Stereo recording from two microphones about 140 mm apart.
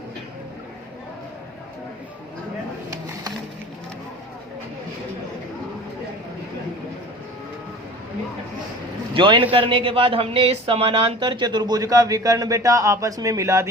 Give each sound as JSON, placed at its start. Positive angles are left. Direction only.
{"t": 9.1, "sound": "a man's voice", "side_deg": -35}